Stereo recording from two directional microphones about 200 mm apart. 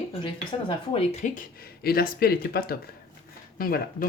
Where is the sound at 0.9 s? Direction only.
35° left (ahead or behind).